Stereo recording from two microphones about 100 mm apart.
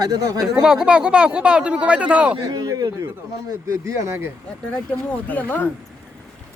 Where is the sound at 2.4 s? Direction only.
40° right (ahead or behind).